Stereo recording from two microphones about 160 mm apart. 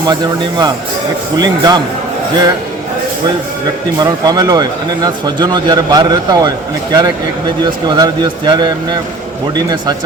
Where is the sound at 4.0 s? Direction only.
25° right (ahead or behind).